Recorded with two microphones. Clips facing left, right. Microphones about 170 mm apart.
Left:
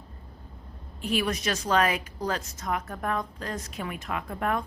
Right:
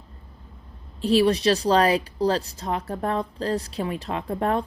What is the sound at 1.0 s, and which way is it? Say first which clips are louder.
Speech: right 9 dB; 35° right (ahead or behind).